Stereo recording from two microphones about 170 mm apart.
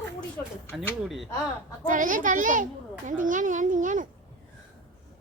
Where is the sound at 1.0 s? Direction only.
Centre (ahead or behind).